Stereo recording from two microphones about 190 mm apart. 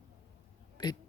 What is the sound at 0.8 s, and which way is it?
Speech, 25° left (ahead or behind).